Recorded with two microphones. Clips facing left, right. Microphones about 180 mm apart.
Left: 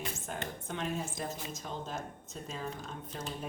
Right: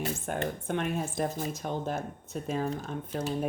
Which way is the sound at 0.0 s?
60° right (ahead or behind).